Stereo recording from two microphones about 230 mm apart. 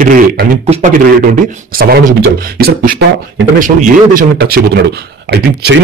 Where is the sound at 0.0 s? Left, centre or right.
Right.